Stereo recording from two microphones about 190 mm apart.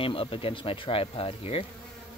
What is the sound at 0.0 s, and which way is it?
Speech, 30° left (ahead or behind).